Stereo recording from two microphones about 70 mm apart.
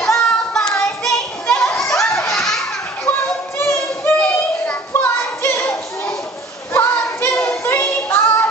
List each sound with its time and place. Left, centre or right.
0.0 s child singing: centre
1.7 s children playing: centre
3.5 s singing: left
4.9 s a sound: left
6.7 s child singing: left
7.4 s music: left